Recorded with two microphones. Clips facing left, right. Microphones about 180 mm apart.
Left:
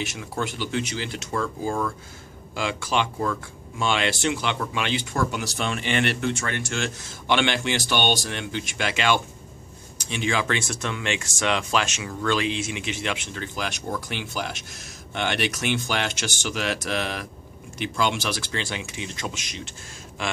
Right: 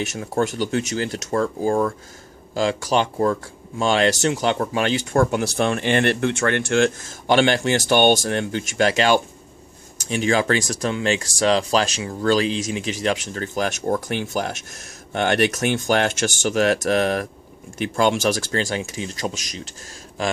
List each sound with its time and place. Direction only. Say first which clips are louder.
0.0 s speech: right 7 dB; 45° right (ahead or behind)